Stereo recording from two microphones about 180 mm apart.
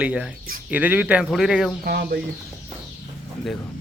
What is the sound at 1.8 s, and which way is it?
Speech, 60° right (ahead or behind).